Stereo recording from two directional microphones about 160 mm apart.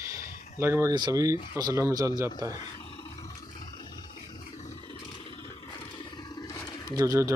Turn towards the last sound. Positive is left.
turn(degrees=-20)  # may be behind; listen again after turning